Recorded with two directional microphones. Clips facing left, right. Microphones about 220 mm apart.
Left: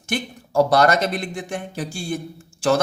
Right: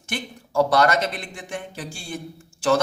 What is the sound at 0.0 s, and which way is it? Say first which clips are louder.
Speech: left 5 dB; 40° left (ahead or behind).